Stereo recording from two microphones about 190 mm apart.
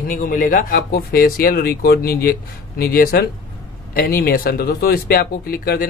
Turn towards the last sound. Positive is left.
turn(degrees=55)  # may be behind; listen again after turning